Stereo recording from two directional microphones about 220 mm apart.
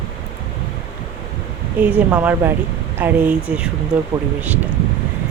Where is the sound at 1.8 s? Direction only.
5° right (ahead or behind).